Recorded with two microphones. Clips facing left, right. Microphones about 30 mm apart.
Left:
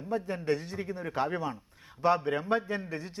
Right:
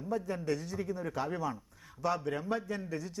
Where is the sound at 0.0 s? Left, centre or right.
Left.